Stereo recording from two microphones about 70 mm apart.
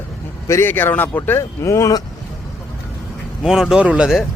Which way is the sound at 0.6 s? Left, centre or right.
Left.